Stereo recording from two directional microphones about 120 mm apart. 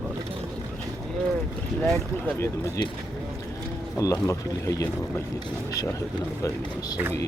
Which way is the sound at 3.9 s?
25° left (ahead or behind).